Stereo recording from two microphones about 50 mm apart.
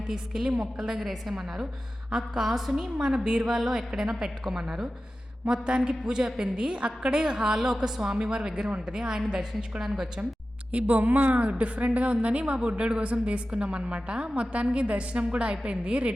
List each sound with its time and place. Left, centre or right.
0.1 s a woman's voice: centre
10.7 s a woman's voice: right
11.3 s a woman's voice: right